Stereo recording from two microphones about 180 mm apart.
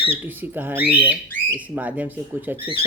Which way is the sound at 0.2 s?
10° right (ahead or behind).